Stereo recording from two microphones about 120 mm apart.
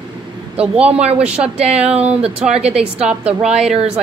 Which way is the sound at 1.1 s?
10° right (ahead or behind).